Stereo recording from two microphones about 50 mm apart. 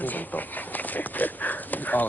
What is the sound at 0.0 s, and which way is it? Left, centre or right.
Speech, left.